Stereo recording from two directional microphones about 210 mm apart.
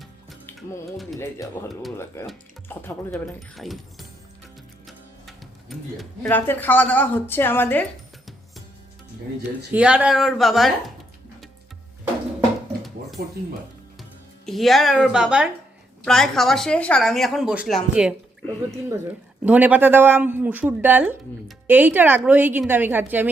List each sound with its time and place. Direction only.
0.3 s music: centre (ahead or behind)
1.2 s speech: 15° left (ahead or behind)
3.5 s speech: centre (ahead or behind)
9.7 s speech: 5° right (ahead or behind)
13.2 s speech: 50° right (ahead or behind)
14.4 s speech: centre (ahead or behind)
19.5 s speech: 5° right (ahead or behind)